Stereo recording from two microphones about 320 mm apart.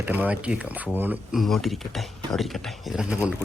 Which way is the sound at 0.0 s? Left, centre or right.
Centre.